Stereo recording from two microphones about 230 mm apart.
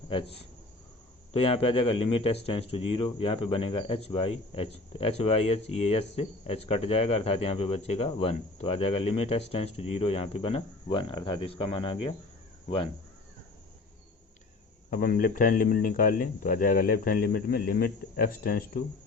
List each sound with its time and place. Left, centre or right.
0.1 s a man's voice: left
14.9 s speech: left